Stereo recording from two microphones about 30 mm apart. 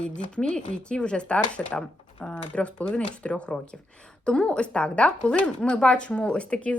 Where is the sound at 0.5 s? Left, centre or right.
Left.